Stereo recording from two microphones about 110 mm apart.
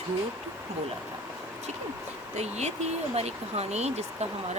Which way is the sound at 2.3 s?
90° right.